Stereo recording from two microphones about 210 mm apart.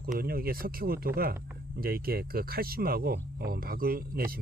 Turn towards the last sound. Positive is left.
turn(degrees=-45)  # may be behind; listen again after turning